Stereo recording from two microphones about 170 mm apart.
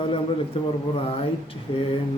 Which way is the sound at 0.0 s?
30° left (ahead or behind).